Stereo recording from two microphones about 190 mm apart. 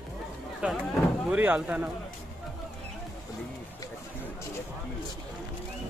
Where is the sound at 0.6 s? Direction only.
5° right (ahead or behind).